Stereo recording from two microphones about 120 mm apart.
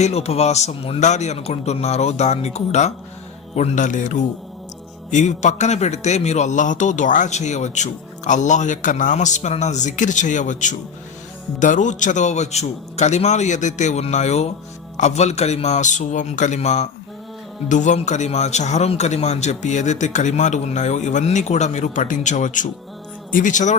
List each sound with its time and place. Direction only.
0.0 s a man's voice: 60° left (ahead or behind); by 4.2 s 90° left
5.1 s a man's voice: 80° left
17.7 s a man's voice: 90° left